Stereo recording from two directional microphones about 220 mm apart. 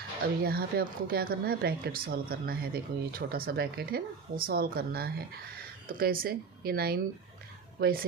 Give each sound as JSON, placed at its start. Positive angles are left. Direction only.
{"t": 0.4, "sound": "a woman's voice", "side_deg": -45}